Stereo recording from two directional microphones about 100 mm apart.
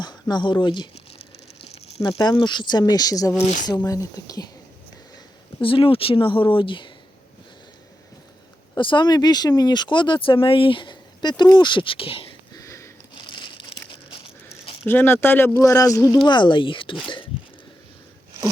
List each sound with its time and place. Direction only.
0.0 s speech: 45° left (ahead or behind)
2.0 s speech: 40° left (ahead or behind)
5.6 s speech: 65° left (ahead or behind)
8.8 s speech: 55° left (ahead or behind)
12.5 s sniff: 30° left (ahead or behind)
13.1 s crumpling: 50° left (ahead or behind)
14.8 s speech: 20° left (ahead or behind)
16.1 s speech: 50° left (ahead or behind)